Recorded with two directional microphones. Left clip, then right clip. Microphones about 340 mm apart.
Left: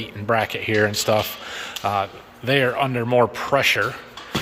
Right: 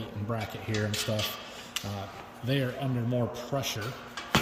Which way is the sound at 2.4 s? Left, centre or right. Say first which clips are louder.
Left 13 dB; centre.